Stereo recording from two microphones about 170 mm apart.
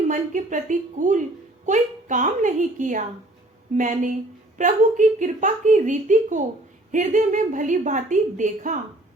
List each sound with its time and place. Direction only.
0.1 s a woman's voice: 50° right (ahead or behind)